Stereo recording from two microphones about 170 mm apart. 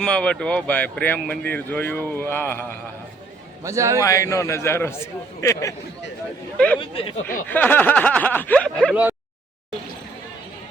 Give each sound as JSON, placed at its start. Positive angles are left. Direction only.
{"t": 0.0, "sound": "speech", "side_deg": 5}
{"t": 3.6, "sound": "a man's voice", "side_deg": -20}
{"t": 4.0, "sound": "speech", "side_deg": 20}
{"t": 6.7, "sound": "speech", "side_deg": 30}
{"t": 7.3, "sound": "speech", "side_deg": 10}